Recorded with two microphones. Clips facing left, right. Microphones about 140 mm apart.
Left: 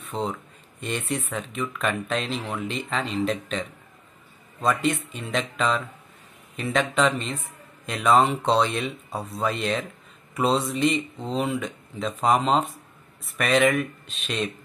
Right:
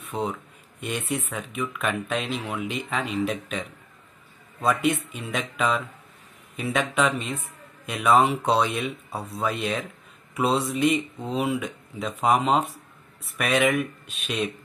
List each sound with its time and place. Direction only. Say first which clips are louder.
0.1 s speech: even; 10° right (ahead or behind)